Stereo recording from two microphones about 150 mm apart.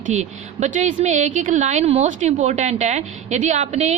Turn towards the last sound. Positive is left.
turn(degrees=-50)  # may be behind; listen again after turning